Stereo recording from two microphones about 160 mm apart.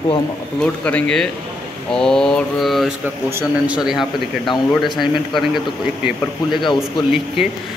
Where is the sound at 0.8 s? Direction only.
5° left (ahead or behind).